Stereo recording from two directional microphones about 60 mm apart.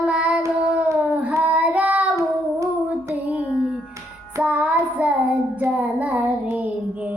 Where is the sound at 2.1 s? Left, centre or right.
Right.